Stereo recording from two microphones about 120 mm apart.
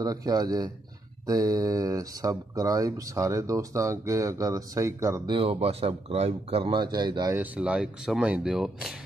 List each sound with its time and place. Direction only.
0.0 s speech: 30° right (ahead or behind)
5.4 s speech: 60° right (ahead or behind); by 7.3 s 35° right (ahead or behind)
7.3 s speech: 10° right (ahead or behind)